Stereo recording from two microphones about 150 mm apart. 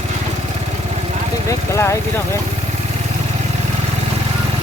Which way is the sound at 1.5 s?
20° left (ahead or behind).